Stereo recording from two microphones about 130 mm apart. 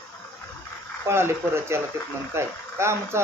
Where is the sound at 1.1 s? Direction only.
20° right (ahead or behind).